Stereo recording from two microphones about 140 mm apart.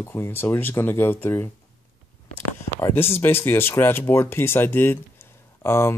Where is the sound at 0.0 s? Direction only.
15° left (ahead or behind).